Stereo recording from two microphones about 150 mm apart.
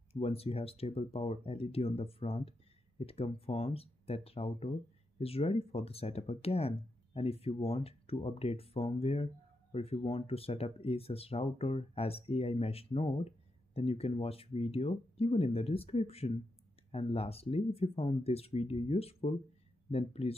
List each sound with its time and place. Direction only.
0.1 s speech: 40° left (ahead or behind)